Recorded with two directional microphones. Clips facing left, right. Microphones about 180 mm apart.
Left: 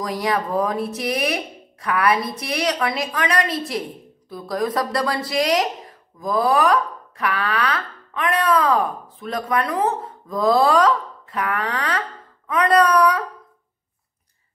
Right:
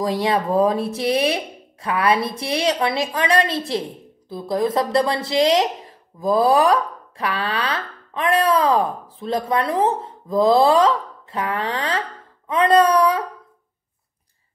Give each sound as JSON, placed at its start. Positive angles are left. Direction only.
{"t": 0.0, "sound": "speech", "side_deg": -30}